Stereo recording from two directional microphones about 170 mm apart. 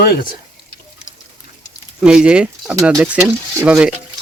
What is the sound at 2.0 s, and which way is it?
Speech, 5° right (ahead or behind).